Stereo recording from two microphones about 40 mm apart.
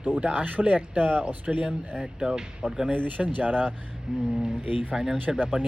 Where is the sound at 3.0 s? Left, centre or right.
Right.